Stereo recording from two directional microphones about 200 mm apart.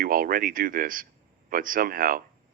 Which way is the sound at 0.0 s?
45° right (ahead or behind).